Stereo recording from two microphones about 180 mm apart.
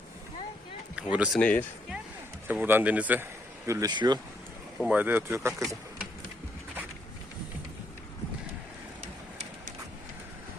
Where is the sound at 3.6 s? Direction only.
20° right (ahead or behind).